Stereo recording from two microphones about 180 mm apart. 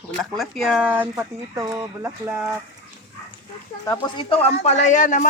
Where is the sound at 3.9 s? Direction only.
25° left (ahead or behind); by 5.2 s 45° left (ahead or behind).